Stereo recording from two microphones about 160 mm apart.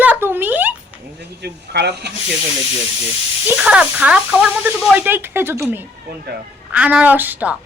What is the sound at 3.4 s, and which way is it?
Speech, 10° right (ahead or behind).